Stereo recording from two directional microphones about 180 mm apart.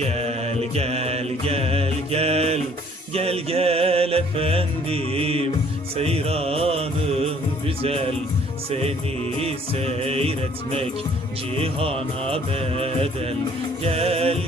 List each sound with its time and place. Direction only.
0.0 s mantra: 35° right (ahead or behind)
3.1 s music: 35° right (ahead or behind)
7.8 s speech: 35° right (ahead or behind)
9.4 s music: 35° right (ahead or behind)